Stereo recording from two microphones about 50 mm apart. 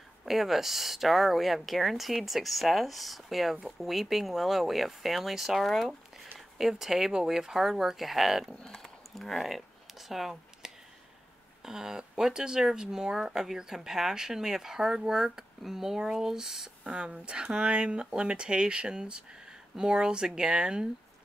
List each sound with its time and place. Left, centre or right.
0.2 s speech: centre
8.8 s a sound: centre
9.9 s speech: centre
16.8 s speech: right